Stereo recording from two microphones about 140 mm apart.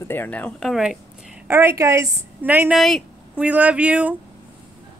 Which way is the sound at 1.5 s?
15° right (ahead or behind).